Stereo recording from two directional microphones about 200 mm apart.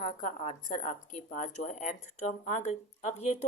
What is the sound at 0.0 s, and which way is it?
A woman's voice, 40° left (ahead or behind).